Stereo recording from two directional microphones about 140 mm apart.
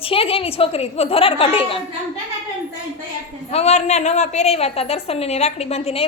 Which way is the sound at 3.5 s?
50° left (ahead or behind).